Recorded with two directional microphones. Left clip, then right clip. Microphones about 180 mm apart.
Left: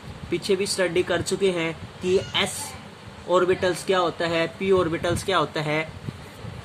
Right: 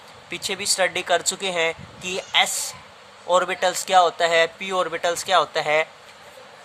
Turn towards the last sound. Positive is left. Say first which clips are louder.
# right 5 dB
turn(degrees=-40)  # may be behind; listen again after turning